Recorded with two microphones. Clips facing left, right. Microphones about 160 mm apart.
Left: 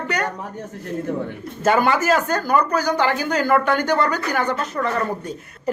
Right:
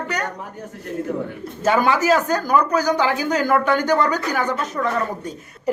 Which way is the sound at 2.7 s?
20° right (ahead or behind).